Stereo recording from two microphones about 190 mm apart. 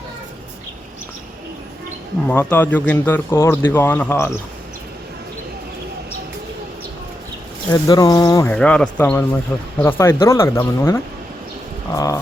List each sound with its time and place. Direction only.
2.2 s a man's voice: 10° left (ahead or behind)
7.7 s speech: 20° left (ahead or behind)
8.5 s a man's voice: 5° left (ahead or behind)